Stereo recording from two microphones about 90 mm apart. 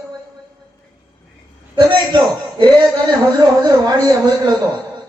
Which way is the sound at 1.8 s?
55° right (ahead or behind).